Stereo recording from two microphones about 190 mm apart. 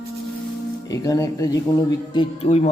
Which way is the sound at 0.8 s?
20° left (ahead or behind).